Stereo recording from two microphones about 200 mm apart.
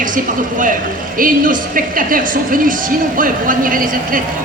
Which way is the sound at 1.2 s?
45° right (ahead or behind).